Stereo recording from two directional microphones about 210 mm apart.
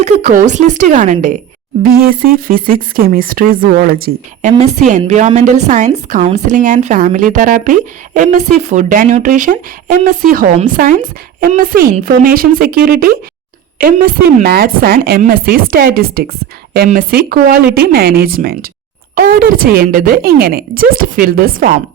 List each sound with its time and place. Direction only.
0.0 s a woman's voice: 35° right (ahead or behind)
4.5 s a woman's voice: 30° right (ahead or behind)